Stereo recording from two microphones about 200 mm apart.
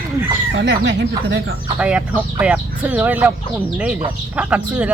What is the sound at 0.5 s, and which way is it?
Speech, 60° right (ahead or behind).